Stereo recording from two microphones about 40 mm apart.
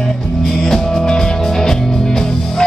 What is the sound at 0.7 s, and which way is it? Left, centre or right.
Music, centre.